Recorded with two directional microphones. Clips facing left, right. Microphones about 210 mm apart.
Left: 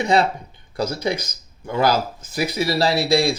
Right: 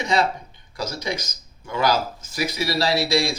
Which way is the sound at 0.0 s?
60° left (ahead or behind).